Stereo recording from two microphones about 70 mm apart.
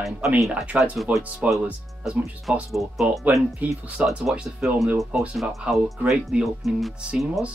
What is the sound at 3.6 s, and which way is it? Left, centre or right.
Speech, right.